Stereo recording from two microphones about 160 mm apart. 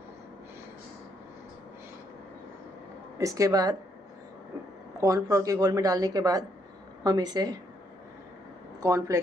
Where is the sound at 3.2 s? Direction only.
20° right (ahead or behind).